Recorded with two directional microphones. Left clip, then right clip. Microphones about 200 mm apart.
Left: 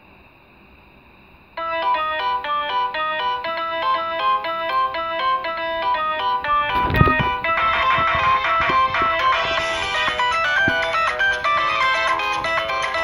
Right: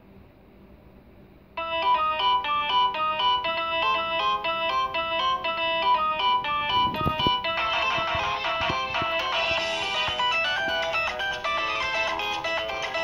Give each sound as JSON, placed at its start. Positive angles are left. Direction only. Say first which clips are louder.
{"t": 1.6, "sound": "music", "louder": "left 3 dB", "side_deg": 15}